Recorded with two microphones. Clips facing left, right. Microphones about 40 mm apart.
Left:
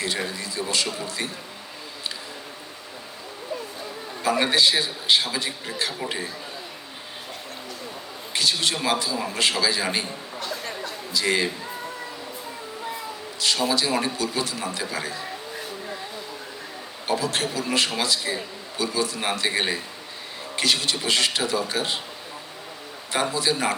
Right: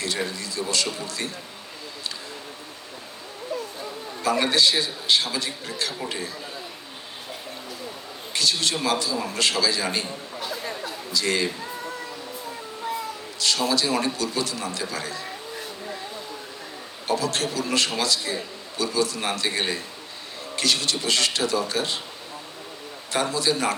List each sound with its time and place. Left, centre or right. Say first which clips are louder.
0.3 s a man's voice: even; centre
4.2 s a man's voice: even; centre
8.3 s a man's voice: even; centre
10.4 s chatter: even; centre
11.1 s a man's voice: left 1 dB; centre
13.4 s a man's voice: even; centre
17.1 s a man's voice: even; centre
23.1 s a man's voice: even; centre